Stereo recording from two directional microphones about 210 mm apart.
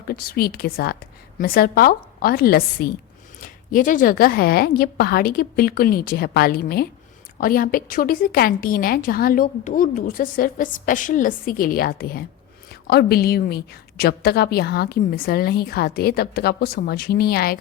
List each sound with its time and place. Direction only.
0.1 s a woman's voice: 45° left (ahead or behind)